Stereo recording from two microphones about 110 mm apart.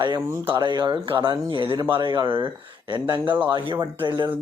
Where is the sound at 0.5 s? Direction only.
45° right (ahead or behind).